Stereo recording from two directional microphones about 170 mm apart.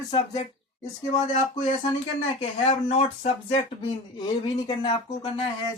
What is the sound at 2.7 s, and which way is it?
Speech, 40° left (ahead or behind).